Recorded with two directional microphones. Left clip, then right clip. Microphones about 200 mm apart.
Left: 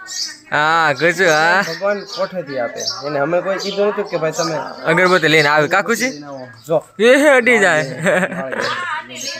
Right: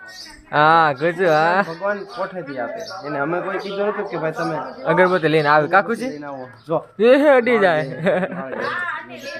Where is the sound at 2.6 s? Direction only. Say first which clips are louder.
Left 6 dB; 45° left (ahead or behind).